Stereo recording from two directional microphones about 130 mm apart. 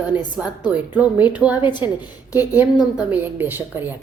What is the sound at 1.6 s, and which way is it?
Speech, 35° left (ahead or behind).